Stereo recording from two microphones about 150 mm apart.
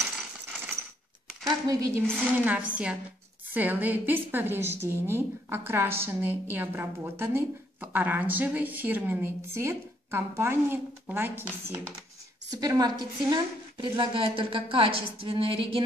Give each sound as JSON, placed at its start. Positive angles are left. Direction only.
{"t": 1.7, "sound": "a woman's voice", "side_deg": -25}
{"t": 2.3, "sound": "a woman's voice", "side_deg": -10}
{"t": 12.4, "sound": "a woman's voice", "side_deg": -25}